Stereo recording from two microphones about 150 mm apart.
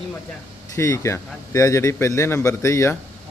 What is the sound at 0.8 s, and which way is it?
A man's voice, 20° left (ahead or behind).